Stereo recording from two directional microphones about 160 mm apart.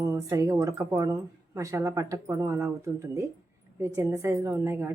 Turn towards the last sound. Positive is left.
turn(degrees=-15)  # may be behind; listen again after turning